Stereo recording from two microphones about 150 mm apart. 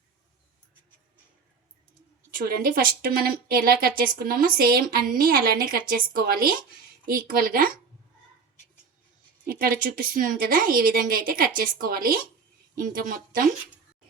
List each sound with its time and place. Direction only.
2.4 s a woman's voice: 90° right
5.1 s a woman's voice: 70° right (ahead or behind)
7.0 s a woman's voice: 70° right (ahead or behind)
9.5 s a woman's voice: 75° right (ahead or behind)